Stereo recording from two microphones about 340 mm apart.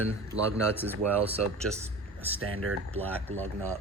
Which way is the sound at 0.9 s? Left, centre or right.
Centre.